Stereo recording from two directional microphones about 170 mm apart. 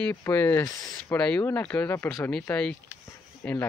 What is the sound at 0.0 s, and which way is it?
Speech, 15° left (ahead or behind).